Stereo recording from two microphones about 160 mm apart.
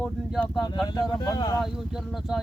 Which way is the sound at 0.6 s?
25° left (ahead or behind).